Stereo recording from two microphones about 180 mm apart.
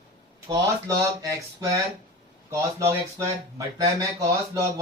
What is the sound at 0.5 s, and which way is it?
Speech, 20° right (ahead or behind).